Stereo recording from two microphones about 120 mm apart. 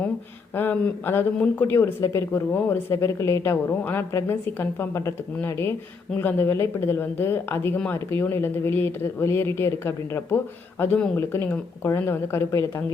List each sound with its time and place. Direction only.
0.5 s speech: 15° left (ahead or behind)